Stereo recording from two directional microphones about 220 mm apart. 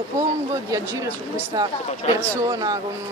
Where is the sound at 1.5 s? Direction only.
15° right (ahead or behind).